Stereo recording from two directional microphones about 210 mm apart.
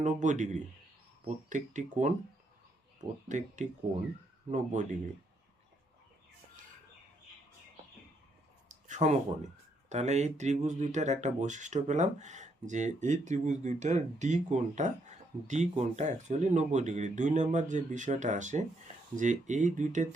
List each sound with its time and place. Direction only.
0.0 s speech: 35° right (ahead or behind)
3.2 s speech: 35° right (ahead or behind)
8.7 s a sound: 35° right (ahead or behind)
9.9 s speech: 30° right (ahead or behind)